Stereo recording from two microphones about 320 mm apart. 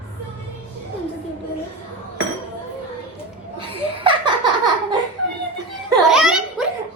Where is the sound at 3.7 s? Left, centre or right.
Centre.